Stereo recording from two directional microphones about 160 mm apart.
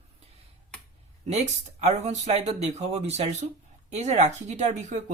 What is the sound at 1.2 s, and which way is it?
Speech, 45° right (ahead or behind).